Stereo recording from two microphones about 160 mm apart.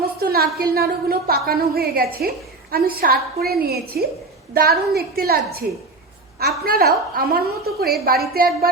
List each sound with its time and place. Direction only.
0.2 s a woman's voice: 70° right (ahead or behind)